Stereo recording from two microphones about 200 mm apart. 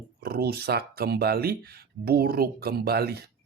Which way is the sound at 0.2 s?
50° right (ahead or behind).